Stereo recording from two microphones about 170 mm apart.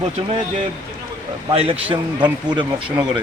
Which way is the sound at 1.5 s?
35° right (ahead or behind).